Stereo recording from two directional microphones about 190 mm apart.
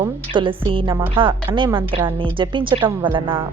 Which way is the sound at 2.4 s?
25° right (ahead or behind).